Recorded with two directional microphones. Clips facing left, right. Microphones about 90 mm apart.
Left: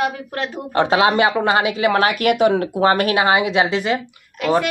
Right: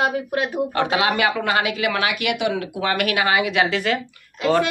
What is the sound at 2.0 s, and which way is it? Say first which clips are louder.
Speech: left 6 dB; 45° left (ahead or behind).